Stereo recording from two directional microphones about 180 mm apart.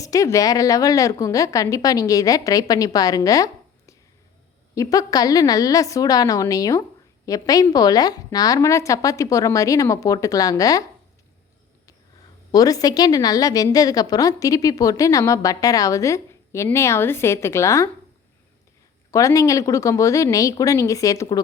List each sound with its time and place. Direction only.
0.0 s a woman's voice: 20° left (ahead or behind)
12.5 s a woman's voice: 20° left (ahead or behind)
19.1 s a woman's voice: 20° left (ahead or behind)